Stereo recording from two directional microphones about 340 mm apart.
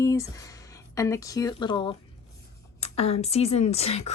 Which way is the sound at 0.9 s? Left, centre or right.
Centre.